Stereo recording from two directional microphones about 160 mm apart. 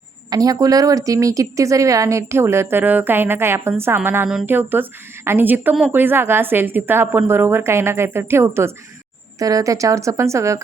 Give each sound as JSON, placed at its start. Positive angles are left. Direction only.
{"t": 0.3, "sound": "a woman's voice", "side_deg": -25}